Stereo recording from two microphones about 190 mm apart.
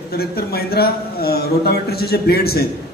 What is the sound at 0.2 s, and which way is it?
A man's voice, 55° left (ahead or behind).